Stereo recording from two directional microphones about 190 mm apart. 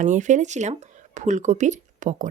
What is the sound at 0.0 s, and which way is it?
Speech, 40° right (ahead or behind).